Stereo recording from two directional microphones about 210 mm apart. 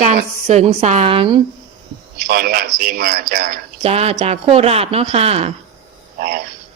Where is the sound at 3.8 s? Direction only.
30° right (ahead or behind).